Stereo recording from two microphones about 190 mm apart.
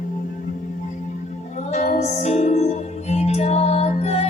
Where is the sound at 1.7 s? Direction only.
40° left (ahead or behind).